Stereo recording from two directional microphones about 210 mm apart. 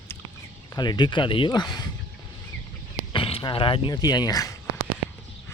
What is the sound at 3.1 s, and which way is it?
Speech, 25° left (ahead or behind).